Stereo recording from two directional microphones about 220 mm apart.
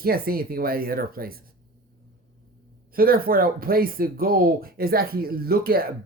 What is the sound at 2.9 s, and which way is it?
Speech, 40° right (ahead or behind).